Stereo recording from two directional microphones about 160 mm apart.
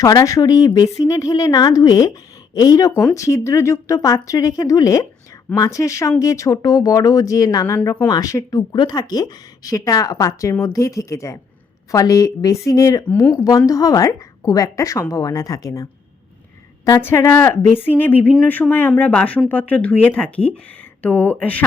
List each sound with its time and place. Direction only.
0.0 s speech: 20° left (ahead or behind)
8.0 s speech: 25° left (ahead or behind)